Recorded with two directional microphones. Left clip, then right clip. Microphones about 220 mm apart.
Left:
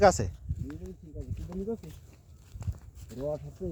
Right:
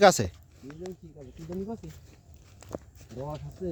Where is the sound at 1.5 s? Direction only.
45° left (ahead or behind).